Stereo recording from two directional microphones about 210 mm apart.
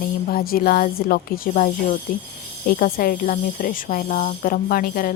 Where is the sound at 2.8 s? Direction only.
40° left (ahead or behind).